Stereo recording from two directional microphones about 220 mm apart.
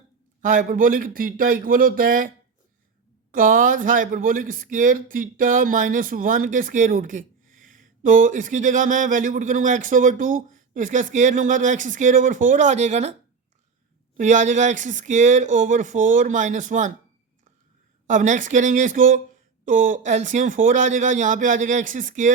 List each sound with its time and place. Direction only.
0.4 s speech: 35° right (ahead or behind)
3.3 s speech: 40° right (ahead or behind)
14.2 s speech: 35° right (ahead or behind)
18.1 s speech: 35° right (ahead or behind)